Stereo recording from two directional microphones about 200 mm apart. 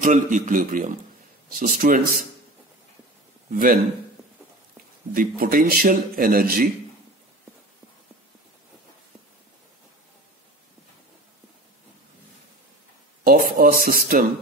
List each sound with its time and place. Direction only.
0.0 s a man's voice: 40° right (ahead or behind)
3.5 s a man's voice: 45° right (ahead or behind)
5.1 s a man's voice: 45° right (ahead or behind)
13.2 s a man's voice: 45° right (ahead or behind)